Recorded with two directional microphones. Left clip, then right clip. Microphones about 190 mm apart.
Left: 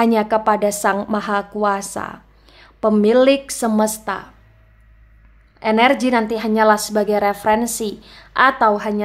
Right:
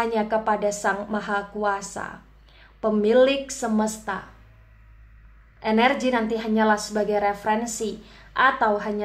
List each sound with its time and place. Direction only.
0.0 s a woman's voice: 40° left (ahead or behind)
5.6 s a woman's voice: 40° left (ahead or behind)